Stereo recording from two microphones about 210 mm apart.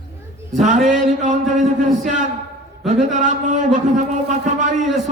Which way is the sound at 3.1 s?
35° right (ahead or behind).